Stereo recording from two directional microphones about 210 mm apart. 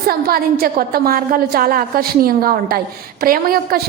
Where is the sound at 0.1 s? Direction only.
45° right (ahead or behind).